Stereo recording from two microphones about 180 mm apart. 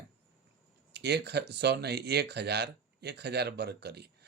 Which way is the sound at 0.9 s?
65° right (ahead or behind).